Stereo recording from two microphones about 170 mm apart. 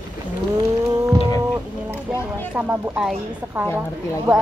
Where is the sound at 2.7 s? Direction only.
5° right (ahead or behind).